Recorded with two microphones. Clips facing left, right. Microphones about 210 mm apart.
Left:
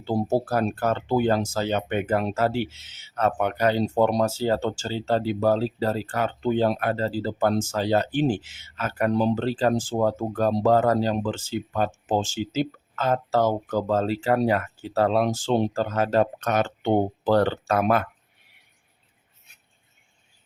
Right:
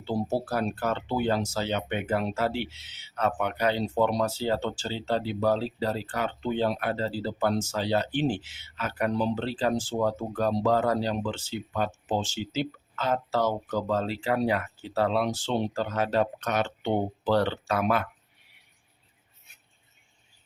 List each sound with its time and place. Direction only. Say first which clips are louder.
0.0 s speech: left 5 dB; 45° left (ahead or behind)